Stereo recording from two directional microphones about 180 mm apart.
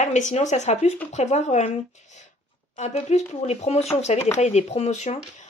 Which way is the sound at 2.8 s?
40° left (ahead or behind).